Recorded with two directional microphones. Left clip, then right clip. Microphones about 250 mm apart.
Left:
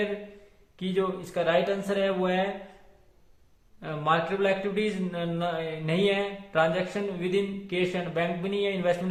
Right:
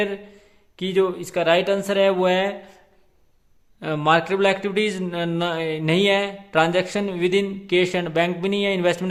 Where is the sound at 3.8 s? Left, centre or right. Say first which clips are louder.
Right 7 dB; right.